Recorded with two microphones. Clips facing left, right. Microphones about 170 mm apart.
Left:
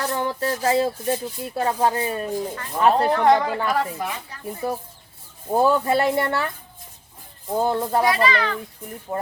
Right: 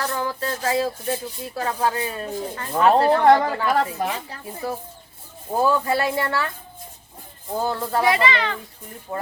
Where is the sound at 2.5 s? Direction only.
30° right (ahead or behind).